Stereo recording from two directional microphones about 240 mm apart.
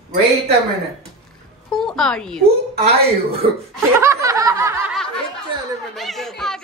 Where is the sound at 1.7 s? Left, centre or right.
Centre.